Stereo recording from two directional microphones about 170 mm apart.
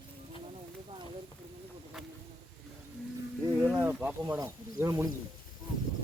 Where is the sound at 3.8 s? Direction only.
10° right (ahead or behind).